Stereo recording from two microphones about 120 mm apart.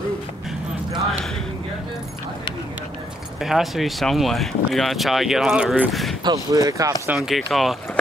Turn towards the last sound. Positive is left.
turn(degrees=0)  # may be behind; listen again after turning